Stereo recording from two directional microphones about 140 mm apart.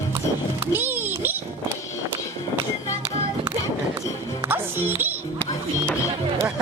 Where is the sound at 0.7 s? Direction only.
15° right (ahead or behind).